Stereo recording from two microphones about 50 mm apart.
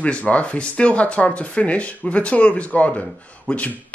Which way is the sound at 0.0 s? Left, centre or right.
Left.